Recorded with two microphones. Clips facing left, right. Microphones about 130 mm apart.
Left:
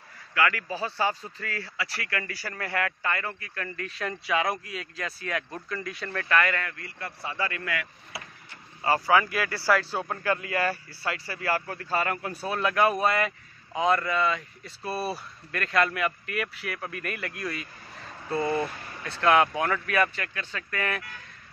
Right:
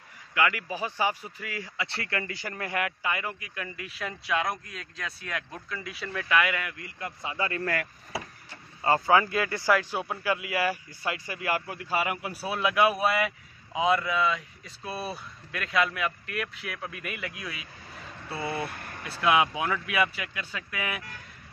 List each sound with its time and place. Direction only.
0.3 s speech: 20° right (ahead or behind)
7.6 s speech: 40° right (ahead or behind)
8.8 s speech: 20° right (ahead or behind); by 18.4 s 5° right (ahead or behind)
18.7 s speech: 55° right (ahead or behind)
19.0 s speech: 5° right (ahead or behind)